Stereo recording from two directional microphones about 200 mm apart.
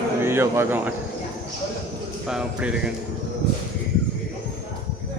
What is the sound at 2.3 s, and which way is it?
Speech, 5° right (ahead or behind).